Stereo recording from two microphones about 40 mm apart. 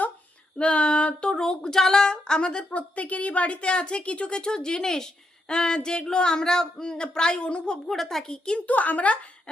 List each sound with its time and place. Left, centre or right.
0.6 s a sound: left
1.5 s a woman's voice: centre
7.9 s a woman's voice: centre
8.5 s speech: left